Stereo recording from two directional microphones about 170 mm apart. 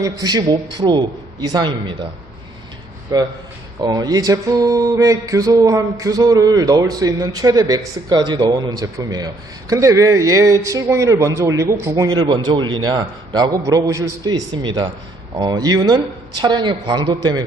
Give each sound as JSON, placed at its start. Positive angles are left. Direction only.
{"t": 0.0, "sound": "mantra", "side_deg": -20}
{"t": 3.1, "sound": "mantra", "side_deg": -20}